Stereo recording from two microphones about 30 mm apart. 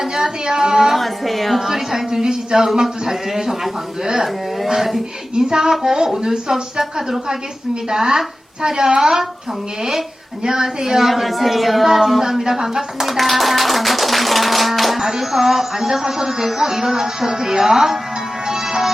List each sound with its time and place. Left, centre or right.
0.0 s a woman's voice: centre
0.9 s speech: centre
1.6 s speech: centre
5.3 s a sound: right
5.7 s speech: centre
7.9 s a sound: centre
9.0 s speech: centre
10.4 s speech: centre
11.1 s speech: centre
13.1 s livestock: centre
15.2 s speech: centre
18.4 s music: centre